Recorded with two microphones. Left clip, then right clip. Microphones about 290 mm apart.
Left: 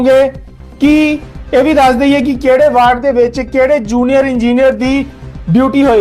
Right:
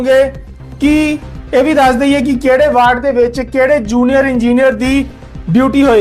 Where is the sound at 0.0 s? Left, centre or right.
Left.